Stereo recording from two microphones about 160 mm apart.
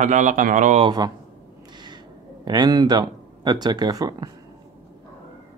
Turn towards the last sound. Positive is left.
turn(degrees=-25)  # may be behind; listen again after turning